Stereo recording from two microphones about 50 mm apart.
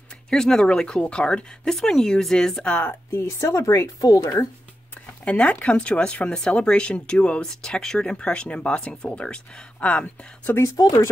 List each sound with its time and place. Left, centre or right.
0.3 s speech: centre
2.8 s speech: left
5.2 s speech: left
7.6 s speech: centre